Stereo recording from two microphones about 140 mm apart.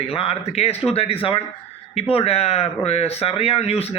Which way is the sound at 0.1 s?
45° left (ahead or behind).